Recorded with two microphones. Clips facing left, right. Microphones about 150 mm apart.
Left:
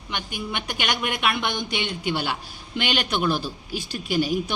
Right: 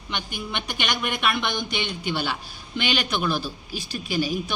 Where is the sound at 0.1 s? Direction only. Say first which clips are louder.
Left 1 dB; 10° left (ahead or behind).